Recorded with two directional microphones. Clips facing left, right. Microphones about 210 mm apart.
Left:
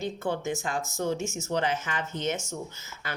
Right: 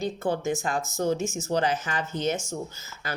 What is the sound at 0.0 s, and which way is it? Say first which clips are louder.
Speech: right 3 dB; 40° right (ahead or behind).